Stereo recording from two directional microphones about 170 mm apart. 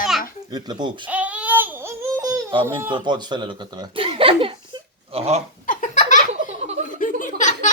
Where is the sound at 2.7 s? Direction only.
15° right (ahead or behind).